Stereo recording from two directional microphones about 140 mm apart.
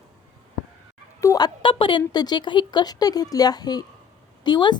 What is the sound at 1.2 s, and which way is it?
A woman's voice, 25° left (ahead or behind).